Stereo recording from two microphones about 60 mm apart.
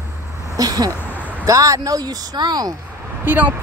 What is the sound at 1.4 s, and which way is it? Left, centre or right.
Speech, right.